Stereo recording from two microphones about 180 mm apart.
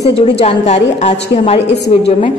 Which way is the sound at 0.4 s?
35° left (ahead or behind).